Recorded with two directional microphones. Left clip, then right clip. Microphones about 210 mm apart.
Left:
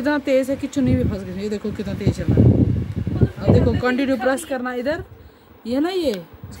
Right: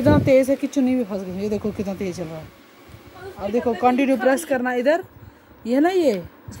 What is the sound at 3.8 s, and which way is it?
Speech, centre (ahead or behind).